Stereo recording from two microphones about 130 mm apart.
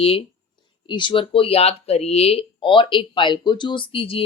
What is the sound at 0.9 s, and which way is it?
Speech, 35° left (ahead or behind).